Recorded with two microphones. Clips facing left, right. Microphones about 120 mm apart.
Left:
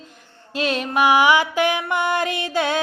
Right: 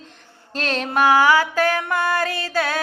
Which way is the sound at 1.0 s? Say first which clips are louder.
Even; 15° left (ahead or behind).